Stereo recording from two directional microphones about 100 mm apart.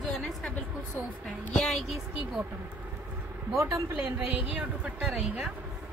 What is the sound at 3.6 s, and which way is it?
Speech, 30° right (ahead or behind).